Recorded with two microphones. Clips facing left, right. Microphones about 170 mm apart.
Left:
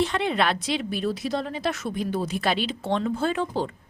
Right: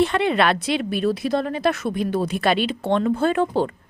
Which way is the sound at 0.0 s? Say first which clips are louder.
Right 5 dB; 60° right (ahead or behind).